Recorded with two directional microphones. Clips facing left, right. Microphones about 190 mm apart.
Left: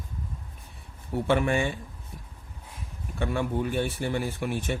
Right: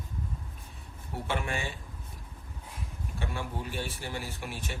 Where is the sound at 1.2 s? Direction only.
55° left (ahead or behind).